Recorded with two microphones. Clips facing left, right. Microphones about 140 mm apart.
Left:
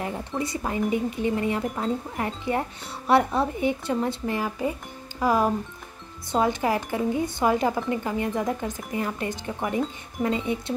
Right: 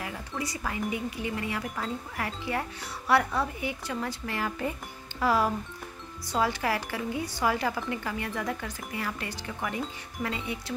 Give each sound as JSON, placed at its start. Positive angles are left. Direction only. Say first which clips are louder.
{"t": 0.0, "sound": "speech", "louder": "left 6 dB", "side_deg": 30}